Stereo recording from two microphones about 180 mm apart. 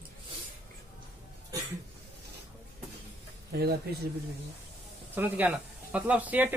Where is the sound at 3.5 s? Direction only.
60° right (ahead or behind).